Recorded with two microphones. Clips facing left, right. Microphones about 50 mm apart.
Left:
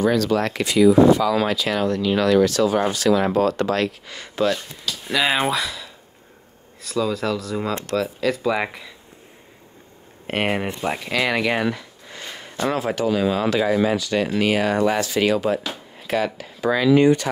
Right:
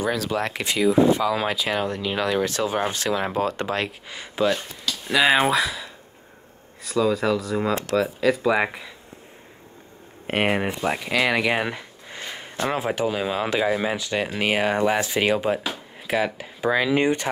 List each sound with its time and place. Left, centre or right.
0.0 s speech: centre
0.7 s speech: right
4.8 s speech: centre
10.2 s speech: centre
11.6 s speech: right